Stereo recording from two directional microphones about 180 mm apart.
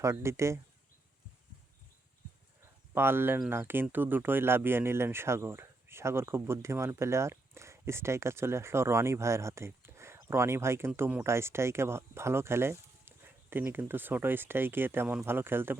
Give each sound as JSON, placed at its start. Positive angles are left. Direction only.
{"t": 0.0, "sound": "speech", "side_deg": -15}
{"t": 2.9, "sound": "speech", "side_deg": -10}